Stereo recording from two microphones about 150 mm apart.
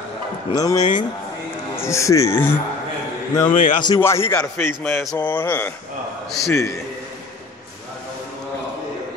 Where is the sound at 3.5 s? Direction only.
65° left (ahead or behind).